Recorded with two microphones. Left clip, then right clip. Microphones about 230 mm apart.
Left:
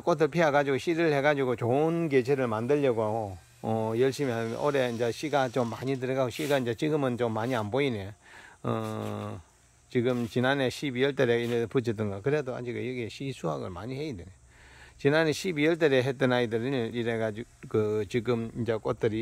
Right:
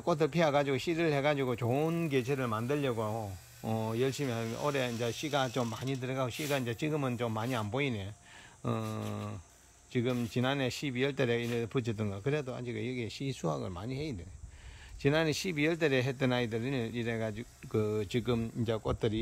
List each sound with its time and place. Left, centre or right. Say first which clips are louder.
0.0 s speech: left 5 dB; centre